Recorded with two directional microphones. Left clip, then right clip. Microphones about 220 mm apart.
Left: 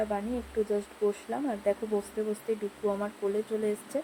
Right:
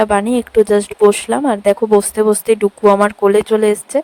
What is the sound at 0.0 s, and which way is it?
Speech, 45° right (ahead or behind).